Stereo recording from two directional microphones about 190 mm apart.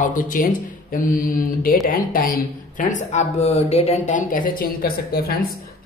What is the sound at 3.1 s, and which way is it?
A man's voice, 35° left (ahead or behind).